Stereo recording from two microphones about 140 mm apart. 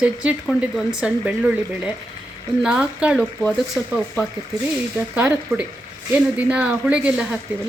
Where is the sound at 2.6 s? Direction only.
5° right (ahead or behind).